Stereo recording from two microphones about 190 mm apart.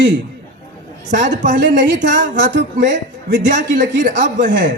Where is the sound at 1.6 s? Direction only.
70° right (ahead or behind).